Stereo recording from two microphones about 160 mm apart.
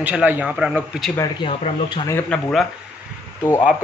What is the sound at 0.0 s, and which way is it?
A man's voice, 10° right (ahead or behind).